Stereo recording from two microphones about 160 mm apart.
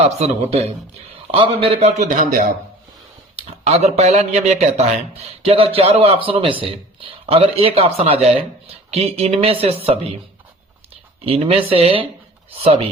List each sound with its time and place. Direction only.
0.0 s a man's voice: 40° right (ahead or behind); by 2.5 s 55° right (ahead or behind)
3.3 s a man's voice: 40° right (ahead or behind)
11.3 s a man's voice: 35° right (ahead or behind)